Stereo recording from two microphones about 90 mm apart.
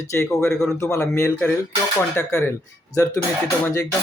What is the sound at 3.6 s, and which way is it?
Speech, 30° left (ahead or behind).